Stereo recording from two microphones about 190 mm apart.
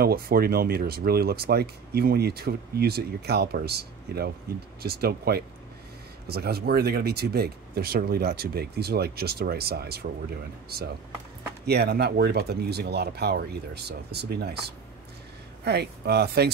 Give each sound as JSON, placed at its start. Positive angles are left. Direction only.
{"t": 0.0, "sound": "speech", "side_deg": -55}
{"t": 15.6, "sound": "speech", "side_deg": -60}